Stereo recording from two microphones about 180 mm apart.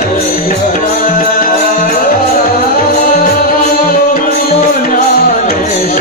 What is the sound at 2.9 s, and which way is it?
Music, 50° left (ahead or behind).